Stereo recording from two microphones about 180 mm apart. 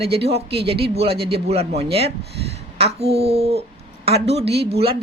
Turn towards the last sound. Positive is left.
turn(degrees=-30)  # may be behind; listen again after turning